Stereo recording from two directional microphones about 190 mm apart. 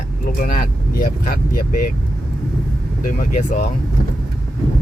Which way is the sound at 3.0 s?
45° left (ahead or behind).